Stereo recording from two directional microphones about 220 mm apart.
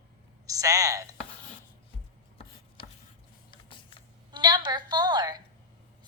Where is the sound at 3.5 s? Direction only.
20° left (ahead or behind).